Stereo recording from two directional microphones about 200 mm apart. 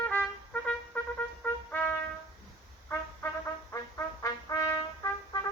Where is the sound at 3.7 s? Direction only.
15° left (ahead or behind).